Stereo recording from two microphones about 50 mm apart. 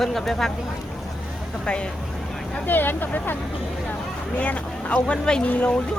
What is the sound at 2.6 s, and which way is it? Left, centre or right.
Speech, left.